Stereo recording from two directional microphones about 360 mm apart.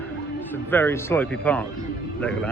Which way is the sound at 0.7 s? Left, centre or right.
Centre.